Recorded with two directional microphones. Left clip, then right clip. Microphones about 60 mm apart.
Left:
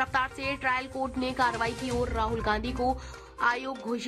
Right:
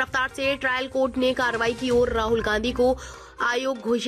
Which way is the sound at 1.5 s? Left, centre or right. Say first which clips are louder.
Right 8 dB; centre.